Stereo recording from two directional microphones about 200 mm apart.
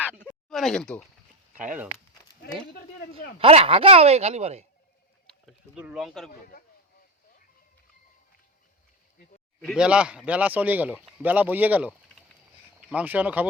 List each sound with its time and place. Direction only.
0.1 s a sound: 10° left (ahead or behind)
1.5 s speech: 5° right (ahead or behind)
3.3 s speech: 30° right (ahead or behind)
5.2 s speech: centre (ahead or behind)
9.6 s speech: centre (ahead or behind)